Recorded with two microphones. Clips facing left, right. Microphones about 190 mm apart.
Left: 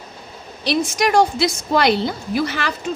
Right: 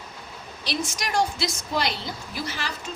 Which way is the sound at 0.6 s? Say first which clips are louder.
Left 11 dB; 65° left (ahead or behind).